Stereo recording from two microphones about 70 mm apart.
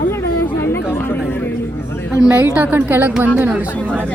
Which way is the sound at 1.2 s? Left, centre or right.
Left.